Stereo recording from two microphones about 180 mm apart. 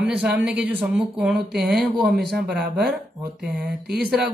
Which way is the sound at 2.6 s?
60° right (ahead or behind).